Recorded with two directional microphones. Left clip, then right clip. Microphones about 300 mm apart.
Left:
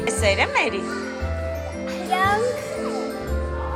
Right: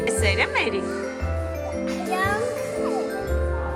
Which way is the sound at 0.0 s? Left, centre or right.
Centre.